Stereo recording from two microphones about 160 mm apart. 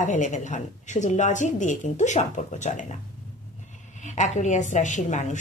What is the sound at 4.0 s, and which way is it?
A woman's voice, 50° left (ahead or behind).